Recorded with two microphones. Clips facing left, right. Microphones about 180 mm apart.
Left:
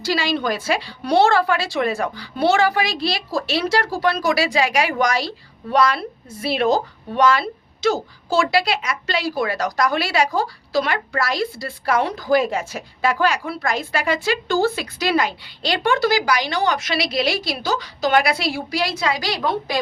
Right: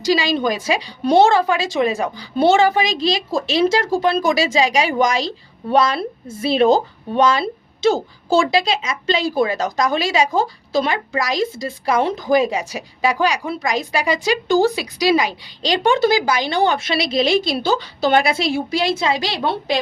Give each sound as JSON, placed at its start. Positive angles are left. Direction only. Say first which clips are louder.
{"t": 0.0, "sound": "speech", "louder": "right 4 dB", "side_deg": -15}